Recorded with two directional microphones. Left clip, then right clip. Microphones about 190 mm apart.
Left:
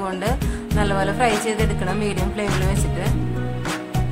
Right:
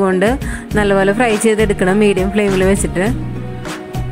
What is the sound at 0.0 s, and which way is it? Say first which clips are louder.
Music: right 10 dB; 35° right (ahead or behind).